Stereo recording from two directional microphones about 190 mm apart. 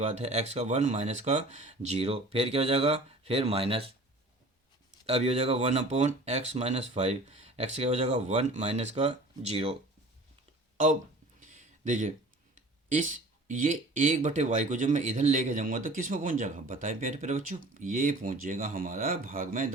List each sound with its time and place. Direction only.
0.0 s speech: 35° right (ahead or behind)
5.0 s speech: 35° right (ahead or behind)
11.3 s a sound: 40° right (ahead or behind)
12.5 s speech: 40° right (ahead or behind)